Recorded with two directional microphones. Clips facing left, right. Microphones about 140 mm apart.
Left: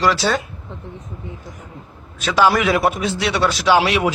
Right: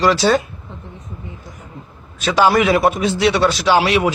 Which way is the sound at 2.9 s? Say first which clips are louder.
Right 4 dB; centre (ahead or behind).